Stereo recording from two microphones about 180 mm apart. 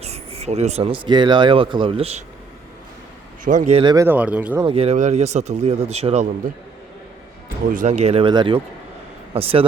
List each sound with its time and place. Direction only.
0.0 s a sound: 35° right (ahead or behind)
1.0 s speech: 25° right (ahead or behind)
3.4 s speech: 45° right (ahead or behind)
3.8 s speech: 25° right (ahead or behind)
4.0 s speech: 10° right (ahead or behind)
4.6 s speech: 30° right (ahead or behind)
7.7 s speech: 45° right (ahead or behind)